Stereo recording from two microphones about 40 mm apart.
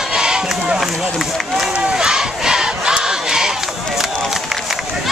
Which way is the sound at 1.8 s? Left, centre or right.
Centre.